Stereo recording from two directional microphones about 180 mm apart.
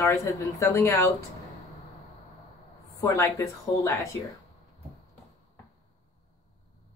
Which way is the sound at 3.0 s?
15° left (ahead or behind).